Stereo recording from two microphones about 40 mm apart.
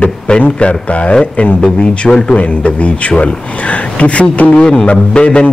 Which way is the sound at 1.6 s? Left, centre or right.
Left.